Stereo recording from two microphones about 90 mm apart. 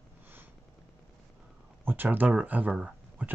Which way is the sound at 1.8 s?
20° right (ahead or behind).